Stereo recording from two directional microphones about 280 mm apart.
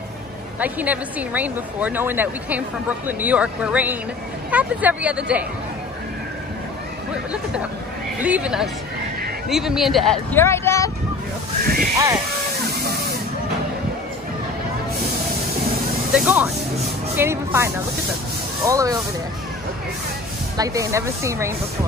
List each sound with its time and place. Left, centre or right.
0.6 s a woman's voice: centre
8.2 s a woman's voice: centre
11.6 s speech: right
16.1 s vehicle: centre
17.1 s speech: centre
18.7 s speech: centre
20.5 s speech: centre